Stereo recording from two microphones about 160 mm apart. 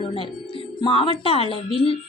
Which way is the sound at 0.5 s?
35° left (ahead or behind).